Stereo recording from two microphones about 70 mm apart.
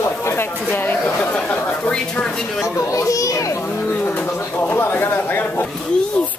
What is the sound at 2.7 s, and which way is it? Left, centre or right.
Children playing, left.